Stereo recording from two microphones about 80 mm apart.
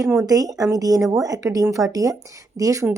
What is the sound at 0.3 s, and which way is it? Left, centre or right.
A woman's voice, right.